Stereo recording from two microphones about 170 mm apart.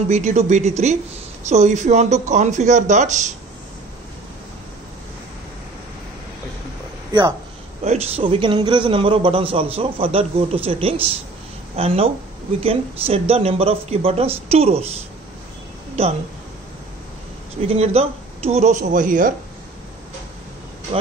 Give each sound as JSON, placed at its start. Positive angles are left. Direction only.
{"t": 0.1, "sound": "a man's voice", "side_deg": -45}
{"t": 7.1, "sound": "speech", "side_deg": -25}
{"t": 7.8, "sound": "a man's voice", "side_deg": -35}
{"t": 17.6, "sound": "speech", "side_deg": -35}
{"t": 20.9, "sound": "a man's voice", "side_deg": -35}